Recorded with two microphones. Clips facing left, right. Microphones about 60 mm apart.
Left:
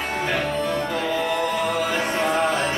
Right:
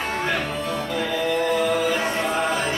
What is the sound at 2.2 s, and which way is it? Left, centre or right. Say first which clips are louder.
Music: left 2 dB; left.